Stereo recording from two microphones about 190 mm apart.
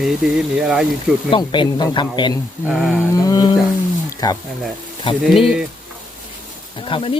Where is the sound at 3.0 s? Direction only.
20° left (ahead or behind).